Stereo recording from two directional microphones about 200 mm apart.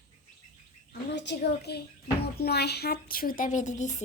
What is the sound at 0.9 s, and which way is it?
A woman's voice, 60° left (ahead or behind).